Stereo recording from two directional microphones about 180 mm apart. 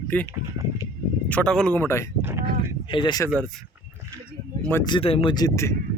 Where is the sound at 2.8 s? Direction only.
25° left (ahead or behind).